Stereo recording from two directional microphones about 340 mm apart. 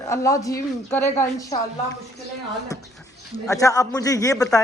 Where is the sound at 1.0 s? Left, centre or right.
Centre.